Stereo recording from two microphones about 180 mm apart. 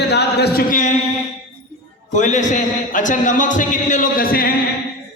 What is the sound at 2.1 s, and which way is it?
A man's voice, 45° left (ahead or behind).